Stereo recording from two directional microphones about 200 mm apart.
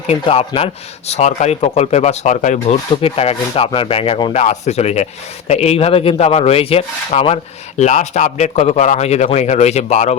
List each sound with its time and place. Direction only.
0.3 s a man's voice: 30° left (ahead or behind)